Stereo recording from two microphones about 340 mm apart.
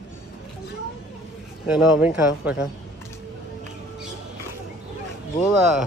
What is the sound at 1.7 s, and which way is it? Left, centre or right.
Speech, centre.